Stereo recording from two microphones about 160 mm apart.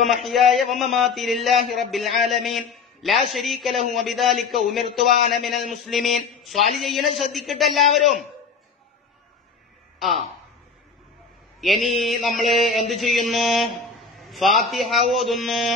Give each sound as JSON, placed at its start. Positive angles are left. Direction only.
{"t": 0.1, "sound": "mantra", "side_deg": 0}
{"t": 11.6, "sound": "mantra", "side_deg": 0}